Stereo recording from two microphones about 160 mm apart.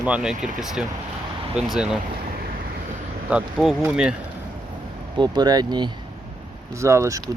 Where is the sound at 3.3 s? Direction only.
5° right (ahead or behind).